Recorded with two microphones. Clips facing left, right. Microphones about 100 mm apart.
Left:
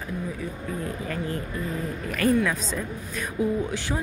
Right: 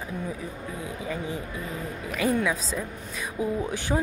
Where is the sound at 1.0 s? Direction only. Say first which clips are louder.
Left 1 dB; 10° right (ahead or behind).